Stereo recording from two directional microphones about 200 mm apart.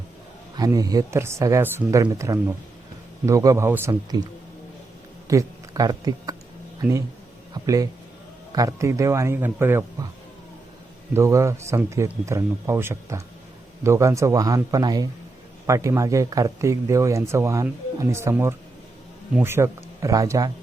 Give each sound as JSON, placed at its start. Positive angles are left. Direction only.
{"t": 0.5, "sound": "speech", "side_deg": -20}
{"t": 5.3, "sound": "speech", "side_deg": -15}
{"t": 7.5, "sound": "a sound", "side_deg": -15}
{"t": 8.5, "sound": "speech", "side_deg": -15}
{"t": 11.1, "sound": "speech", "side_deg": -15}